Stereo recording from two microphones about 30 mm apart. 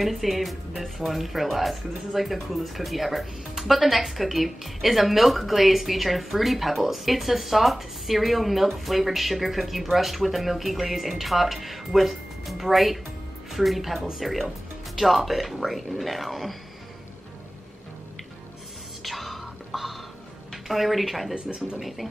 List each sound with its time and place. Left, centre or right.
0.0 s speech: centre
1.1 s speech: centre
19.0 s music: centre
20.6 s speech: centre